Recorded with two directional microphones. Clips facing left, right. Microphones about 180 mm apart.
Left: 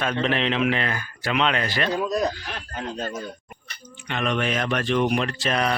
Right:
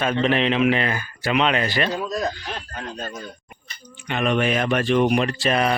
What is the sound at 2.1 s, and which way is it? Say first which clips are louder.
Speech: left 2 dB; 15° left (ahead or behind).